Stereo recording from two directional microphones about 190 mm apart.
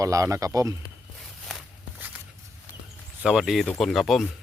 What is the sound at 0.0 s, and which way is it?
Speech, 15° right (ahead or behind).